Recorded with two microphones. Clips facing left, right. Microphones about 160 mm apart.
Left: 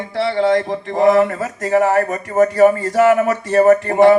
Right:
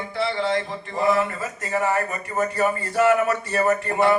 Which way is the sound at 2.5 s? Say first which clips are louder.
Left 10 dB; 80° left.